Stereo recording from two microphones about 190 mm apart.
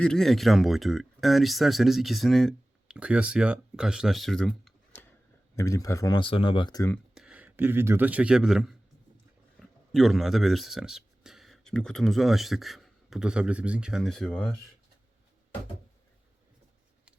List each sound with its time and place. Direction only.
0.0 s speech: 5° left (ahead or behind)
5.5 s speech: 15° left (ahead or behind)
6.9 s speech: centre (ahead or behind)